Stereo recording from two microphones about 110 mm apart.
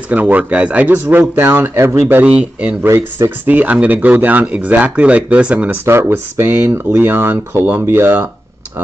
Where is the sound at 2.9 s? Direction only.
25° right (ahead or behind).